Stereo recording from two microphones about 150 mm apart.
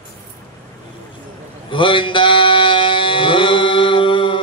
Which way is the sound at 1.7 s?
35° left (ahead or behind).